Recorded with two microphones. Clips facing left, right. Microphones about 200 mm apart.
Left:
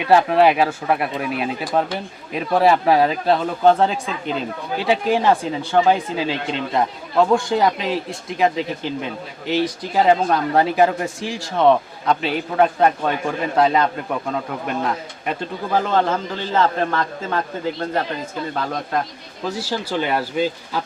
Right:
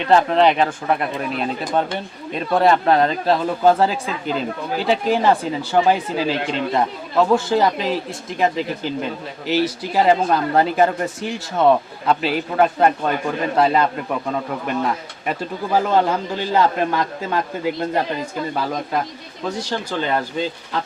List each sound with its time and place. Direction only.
0.0 s speech: 10° left (ahead or behind)
15.3 s a man's voice: 10° right (ahead or behind)
18.5 s speech: 5° right (ahead or behind)